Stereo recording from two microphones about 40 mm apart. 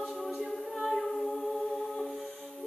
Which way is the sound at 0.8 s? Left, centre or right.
Centre.